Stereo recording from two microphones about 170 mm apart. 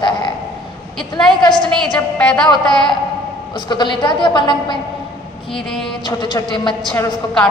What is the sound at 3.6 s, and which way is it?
A woman's voice, 25° left (ahead or behind).